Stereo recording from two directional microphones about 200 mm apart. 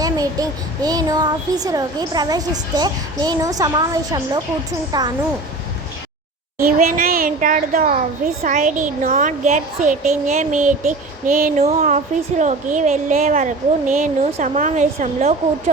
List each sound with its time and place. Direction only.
0.0 s a child's voice: 20° right (ahead or behind)
6.6 s a woman's voice: 45° right (ahead or behind)